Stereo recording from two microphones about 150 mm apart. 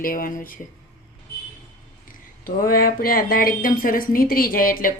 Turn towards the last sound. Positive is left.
turn(degrees=70)  # may be behind; listen again after turning